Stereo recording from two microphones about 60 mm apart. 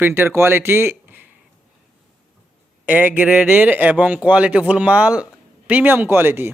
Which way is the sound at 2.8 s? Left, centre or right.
Right.